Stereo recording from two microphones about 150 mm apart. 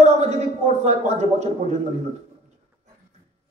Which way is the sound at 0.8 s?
50° right (ahead or behind).